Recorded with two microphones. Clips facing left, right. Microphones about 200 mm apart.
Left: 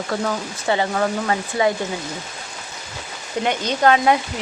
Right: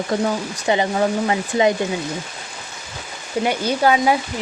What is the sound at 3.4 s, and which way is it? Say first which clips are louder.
Speech: even; 10° right (ahead or behind).